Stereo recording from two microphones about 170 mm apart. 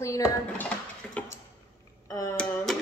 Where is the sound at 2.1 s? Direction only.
20° left (ahead or behind).